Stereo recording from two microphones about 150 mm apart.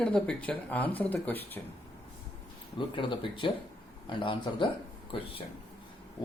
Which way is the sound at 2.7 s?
35° left (ahead or behind).